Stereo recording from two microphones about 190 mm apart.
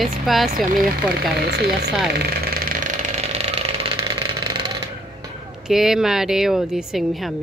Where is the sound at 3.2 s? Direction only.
35° right (ahead or behind).